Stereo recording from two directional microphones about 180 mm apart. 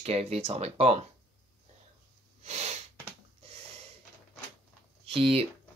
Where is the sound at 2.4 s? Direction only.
35° right (ahead or behind).